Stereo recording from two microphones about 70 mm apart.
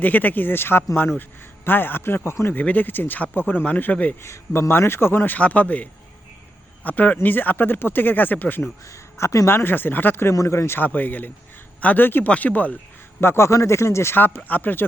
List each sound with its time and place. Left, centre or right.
0.0 s speech: left
2.6 s speech: left
4.2 s a man's voice: left
8.9 s speech: left
9.5 s a man's voice: left
10.3 s speech: left
10.8 s speech: left
13.2 s a man's voice: left
14.2 s speech: left